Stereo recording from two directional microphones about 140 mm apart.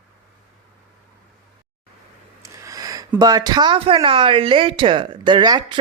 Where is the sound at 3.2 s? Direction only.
30° right (ahead or behind).